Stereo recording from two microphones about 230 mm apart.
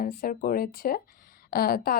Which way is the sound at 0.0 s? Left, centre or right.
Left.